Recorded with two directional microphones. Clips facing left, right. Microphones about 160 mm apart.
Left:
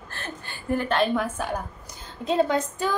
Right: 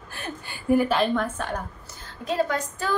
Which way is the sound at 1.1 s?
10° left (ahead or behind).